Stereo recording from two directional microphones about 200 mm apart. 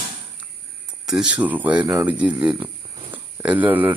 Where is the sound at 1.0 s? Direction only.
5° right (ahead or behind).